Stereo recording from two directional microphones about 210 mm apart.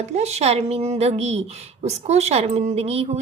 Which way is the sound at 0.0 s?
30° right (ahead or behind).